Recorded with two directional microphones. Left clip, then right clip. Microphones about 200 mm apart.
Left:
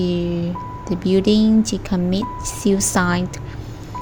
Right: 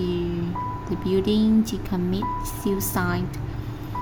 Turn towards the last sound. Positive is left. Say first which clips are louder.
# left 7 dB
turn(degrees=30)  # may be behind; listen again after turning